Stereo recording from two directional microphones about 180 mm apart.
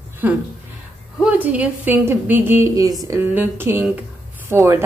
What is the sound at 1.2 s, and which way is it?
A woman's voice, 10° right (ahead or behind).